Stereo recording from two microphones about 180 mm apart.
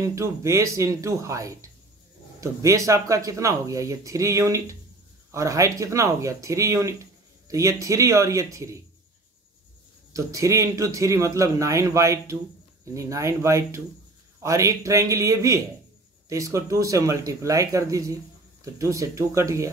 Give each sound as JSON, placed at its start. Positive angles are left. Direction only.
{"t": 0.0, "sound": "speech", "side_deg": -15}
{"t": 10.1, "sound": "speech", "side_deg": -15}